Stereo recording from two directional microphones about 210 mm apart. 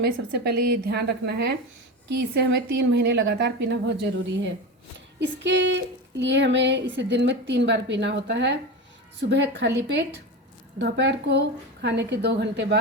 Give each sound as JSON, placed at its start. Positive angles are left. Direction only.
{"t": 0.0, "sound": "a woman's voice", "side_deg": -50}
{"t": 2.0, "sound": "a sound", "side_deg": -55}
{"t": 9.3, "sound": "a woman's voice", "side_deg": -55}